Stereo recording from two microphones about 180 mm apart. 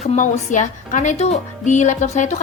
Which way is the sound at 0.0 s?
45° left (ahead or behind).